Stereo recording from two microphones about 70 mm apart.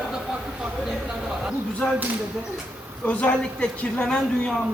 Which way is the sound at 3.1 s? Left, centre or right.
Centre.